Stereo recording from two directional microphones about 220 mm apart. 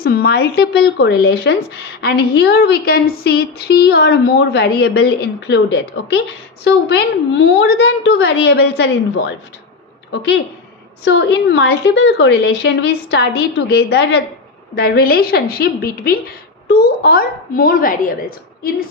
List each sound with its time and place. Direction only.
0.0 s a child's voice: 45° left (ahead or behind)